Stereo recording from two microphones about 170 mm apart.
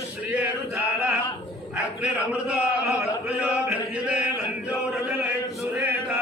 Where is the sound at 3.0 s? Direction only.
5° right (ahead or behind).